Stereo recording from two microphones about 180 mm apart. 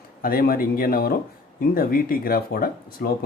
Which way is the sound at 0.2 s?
55° left (ahead or behind).